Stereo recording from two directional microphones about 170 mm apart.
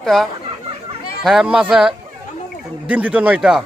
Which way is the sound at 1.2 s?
Centre (ahead or behind).